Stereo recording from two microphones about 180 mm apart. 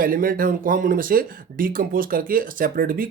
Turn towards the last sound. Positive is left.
turn(degrees=-55)  # may be behind; listen again after turning